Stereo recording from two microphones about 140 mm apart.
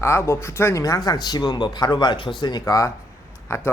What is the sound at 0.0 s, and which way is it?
Speech, 20° left (ahead or behind).